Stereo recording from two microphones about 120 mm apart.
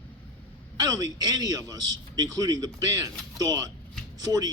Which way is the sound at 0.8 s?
30° right (ahead or behind).